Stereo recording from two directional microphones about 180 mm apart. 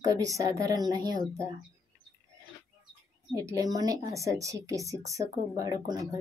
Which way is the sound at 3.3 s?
20° right (ahead or behind).